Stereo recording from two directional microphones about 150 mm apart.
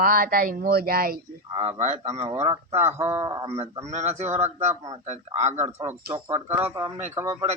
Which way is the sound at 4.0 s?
50° right (ahead or behind).